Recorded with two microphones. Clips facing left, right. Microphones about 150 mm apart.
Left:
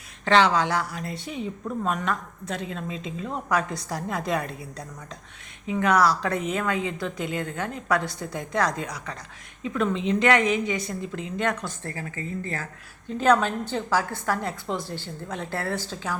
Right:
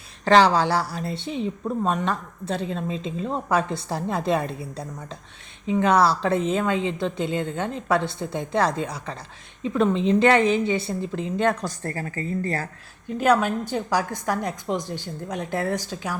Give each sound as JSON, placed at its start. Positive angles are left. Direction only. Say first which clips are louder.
{"t": 0.3, "sound": "a woman's voice", "louder": "right 3 dB", "side_deg": -35}
{"t": 13.1, "sound": "a woman's voice", "louder": "right 1 dB", "side_deg": -10}